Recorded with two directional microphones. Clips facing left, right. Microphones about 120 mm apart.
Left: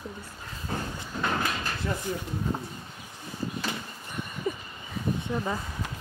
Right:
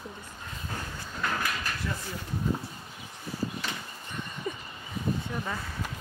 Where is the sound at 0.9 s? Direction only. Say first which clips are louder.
Left 1 dB; 25° left (ahead or behind).